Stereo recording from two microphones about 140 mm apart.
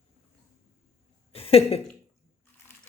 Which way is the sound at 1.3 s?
45° left (ahead or behind).